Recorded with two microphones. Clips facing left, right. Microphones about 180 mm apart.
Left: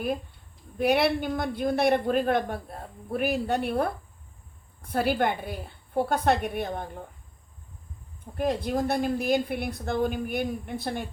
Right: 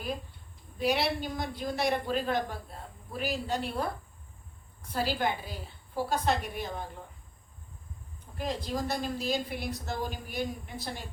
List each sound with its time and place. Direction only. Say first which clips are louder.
0.8 s speech: left 6 dB; 55° left (ahead or behind)
4.9 s speech: left 5 dB; 55° left (ahead or behind)
8.4 s speech: left 7 dB; 55° left (ahead or behind)